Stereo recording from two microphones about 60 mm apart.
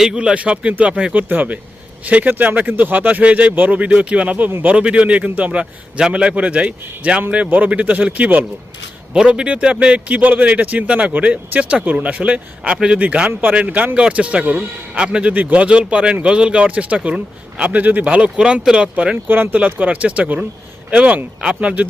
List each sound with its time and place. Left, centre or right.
0.0 s speech: centre
9.1 s speech: centre
19.3 s speech: right